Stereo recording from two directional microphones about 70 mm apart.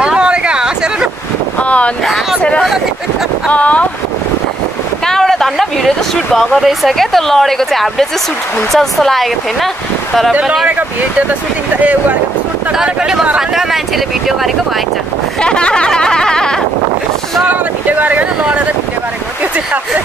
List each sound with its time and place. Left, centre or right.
0.0 s a sound: centre
1.6 s boat: centre
3.4 s speech: centre
5.0 s speech: centre
11.8 s speech: centre
12.7 s speech: centre
15.4 s speech: centre
17.5 s speech: right